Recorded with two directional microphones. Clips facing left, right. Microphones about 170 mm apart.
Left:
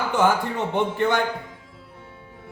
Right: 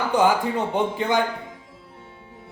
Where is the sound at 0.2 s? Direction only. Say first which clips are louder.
Right 1 dB; 15° right (ahead or behind).